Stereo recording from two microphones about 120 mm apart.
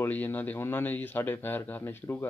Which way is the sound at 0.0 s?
15° left (ahead or behind).